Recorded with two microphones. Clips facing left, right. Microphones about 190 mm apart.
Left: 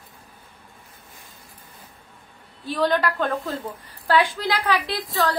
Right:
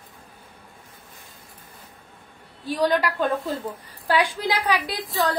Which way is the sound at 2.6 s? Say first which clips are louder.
Even; 10° right (ahead or behind).